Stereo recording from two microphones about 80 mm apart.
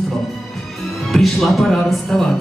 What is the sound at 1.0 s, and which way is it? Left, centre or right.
Speech, centre.